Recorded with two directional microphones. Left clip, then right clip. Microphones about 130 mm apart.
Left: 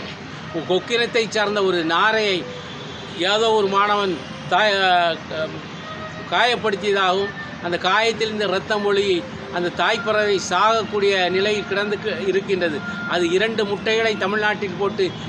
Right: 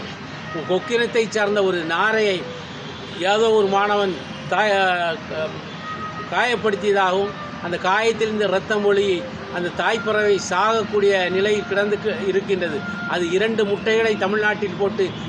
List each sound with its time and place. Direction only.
0.7 s speech: 40° left (ahead or behind)
6.3 s speech: 40° left (ahead or behind)